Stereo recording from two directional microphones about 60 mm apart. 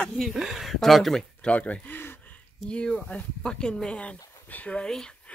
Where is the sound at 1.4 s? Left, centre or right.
Left.